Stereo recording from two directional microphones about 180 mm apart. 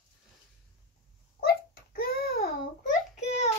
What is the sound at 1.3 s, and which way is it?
Babbling, 55° left (ahead or behind).